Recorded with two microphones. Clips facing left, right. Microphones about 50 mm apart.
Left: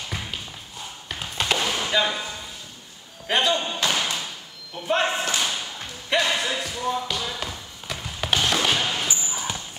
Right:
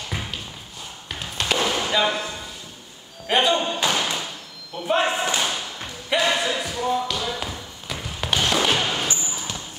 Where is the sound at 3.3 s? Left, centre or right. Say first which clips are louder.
Right 3 dB; centre.